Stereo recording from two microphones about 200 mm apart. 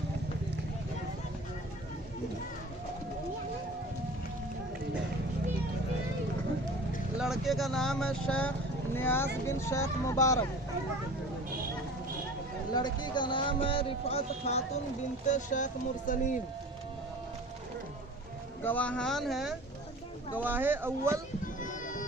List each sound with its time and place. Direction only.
7.2 s speech: centre (ahead or behind); by 10.4 s 15° left (ahead or behind)
12.7 s speech: 20° left (ahead or behind); by 16.4 s 40° left (ahead or behind)
18.6 s speech: 10° left (ahead or behind); by 21.2 s 10° right (ahead or behind)
21.4 s music: 40° left (ahead or behind)